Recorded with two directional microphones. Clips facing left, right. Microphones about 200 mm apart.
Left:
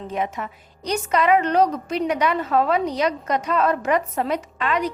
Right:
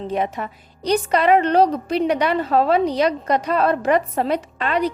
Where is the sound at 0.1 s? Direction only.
35° right (ahead or behind).